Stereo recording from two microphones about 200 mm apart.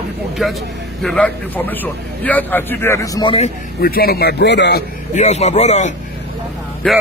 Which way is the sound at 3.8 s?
50° left (ahead or behind).